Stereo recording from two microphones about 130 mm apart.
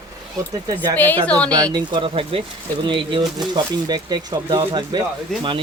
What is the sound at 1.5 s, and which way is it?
Speech, 30° right (ahead or behind).